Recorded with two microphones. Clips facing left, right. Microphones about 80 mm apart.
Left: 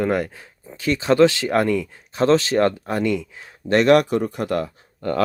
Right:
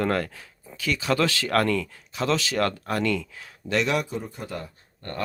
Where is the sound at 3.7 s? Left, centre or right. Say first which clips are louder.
Left 10 dB; left.